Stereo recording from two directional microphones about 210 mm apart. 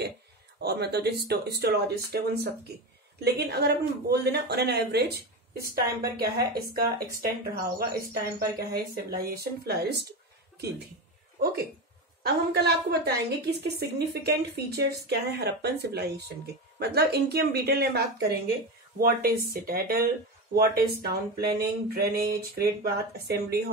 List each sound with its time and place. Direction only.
0.6 s speech: 50° right (ahead or behind)
12.2 s speech: 50° right (ahead or behind)